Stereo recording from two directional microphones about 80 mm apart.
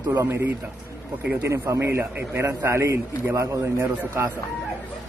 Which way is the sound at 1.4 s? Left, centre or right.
Right.